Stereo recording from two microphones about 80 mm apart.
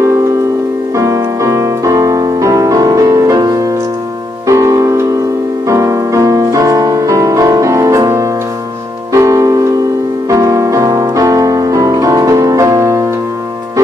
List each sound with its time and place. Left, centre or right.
0.9 s music: right